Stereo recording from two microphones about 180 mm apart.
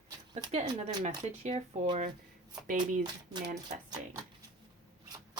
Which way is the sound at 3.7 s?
20° right (ahead or behind).